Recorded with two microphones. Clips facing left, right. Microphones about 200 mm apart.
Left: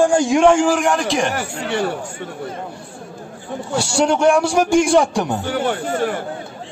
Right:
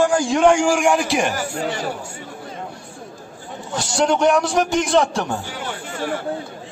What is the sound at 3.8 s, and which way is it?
A man's voice, 10° left (ahead or behind).